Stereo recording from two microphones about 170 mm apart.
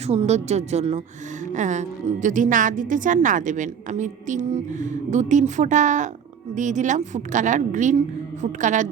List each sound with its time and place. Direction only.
0.1 s a woman's voice: 40° right (ahead or behind)